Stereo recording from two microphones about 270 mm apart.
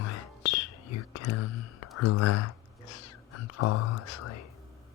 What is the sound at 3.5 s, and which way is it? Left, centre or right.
Speech, left.